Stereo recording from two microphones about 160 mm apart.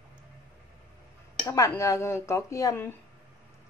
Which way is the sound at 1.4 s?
20° left (ahead or behind).